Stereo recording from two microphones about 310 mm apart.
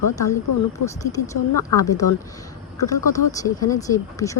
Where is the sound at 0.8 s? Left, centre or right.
Left.